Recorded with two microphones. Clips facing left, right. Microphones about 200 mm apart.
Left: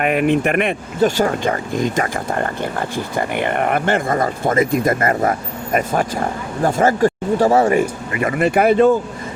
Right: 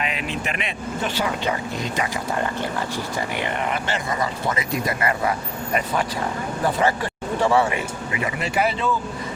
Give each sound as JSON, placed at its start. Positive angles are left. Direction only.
{"t": 0.0, "sound": "speech", "side_deg": 55}